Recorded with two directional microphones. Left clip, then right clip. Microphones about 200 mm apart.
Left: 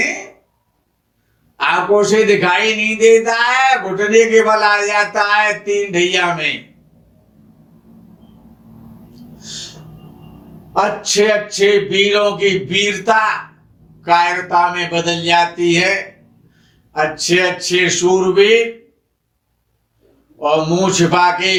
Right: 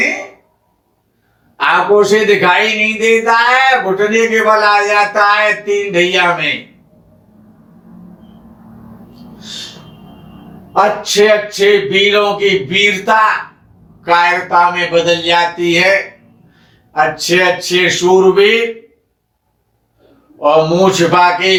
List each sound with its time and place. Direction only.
1.5 s speech: 45° left (ahead or behind)
10.8 s speech: 45° left (ahead or behind)
16.9 s speech: 45° left (ahead or behind)
20.4 s speech: 45° left (ahead or behind)